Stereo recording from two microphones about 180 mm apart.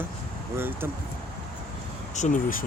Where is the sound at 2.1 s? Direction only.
45° left (ahead or behind).